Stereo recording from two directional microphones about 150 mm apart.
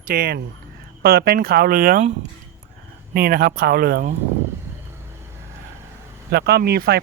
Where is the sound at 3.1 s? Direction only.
80° right.